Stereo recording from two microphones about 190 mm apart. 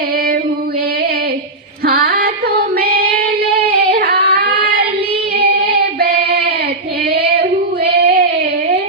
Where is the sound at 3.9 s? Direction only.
55° right (ahead or behind).